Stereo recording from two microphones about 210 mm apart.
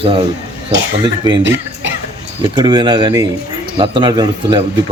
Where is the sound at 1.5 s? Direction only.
60° right (ahead or behind).